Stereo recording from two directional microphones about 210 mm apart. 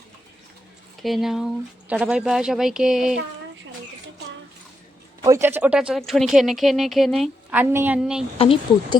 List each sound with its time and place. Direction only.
1.0 s speech: centre (ahead or behind)
5.2 s speech: 15° right (ahead or behind)
8.4 s speech: 25° left (ahead or behind)